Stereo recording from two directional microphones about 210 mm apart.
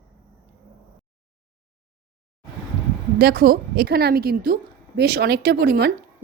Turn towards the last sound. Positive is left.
turn(degrees=-50)  # may be behind; listen again after turning